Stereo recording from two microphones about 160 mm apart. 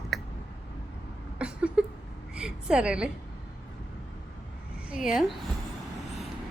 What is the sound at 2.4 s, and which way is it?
Speech, 5° right (ahead or behind).